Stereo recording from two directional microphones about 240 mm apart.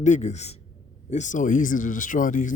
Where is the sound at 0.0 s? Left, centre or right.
Left.